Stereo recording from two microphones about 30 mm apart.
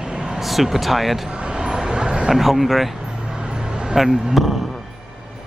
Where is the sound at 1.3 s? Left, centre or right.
Right.